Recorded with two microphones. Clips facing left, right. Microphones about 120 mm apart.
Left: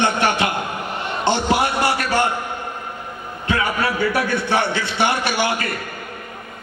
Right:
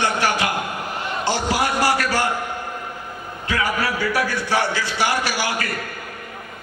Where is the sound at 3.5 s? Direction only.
25° left (ahead or behind).